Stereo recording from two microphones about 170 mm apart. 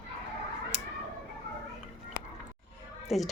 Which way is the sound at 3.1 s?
Centre (ahead or behind).